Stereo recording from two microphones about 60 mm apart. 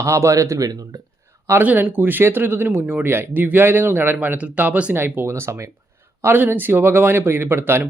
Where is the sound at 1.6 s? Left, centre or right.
Right.